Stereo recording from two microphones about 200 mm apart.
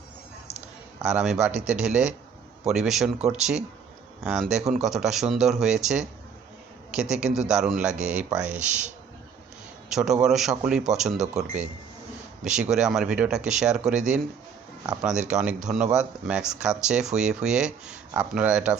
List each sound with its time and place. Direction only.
1.0 s speech: 5° right (ahead or behind)
4.2 s speech: 5° right (ahead or behind)
9.9 s speech: 5° right (ahead or behind)
12.7 s speech: 5° right (ahead or behind)